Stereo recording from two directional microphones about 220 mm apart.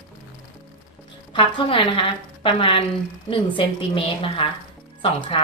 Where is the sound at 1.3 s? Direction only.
25° left (ahead or behind).